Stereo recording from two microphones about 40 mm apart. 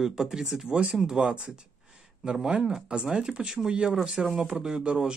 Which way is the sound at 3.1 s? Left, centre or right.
Right.